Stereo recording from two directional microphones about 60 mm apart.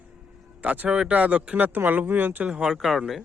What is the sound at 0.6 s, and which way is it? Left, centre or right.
Speech, right.